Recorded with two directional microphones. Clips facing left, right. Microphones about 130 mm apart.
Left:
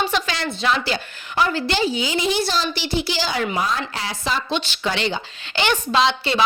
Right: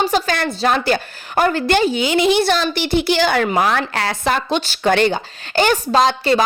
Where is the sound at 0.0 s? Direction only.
45° right (ahead or behind).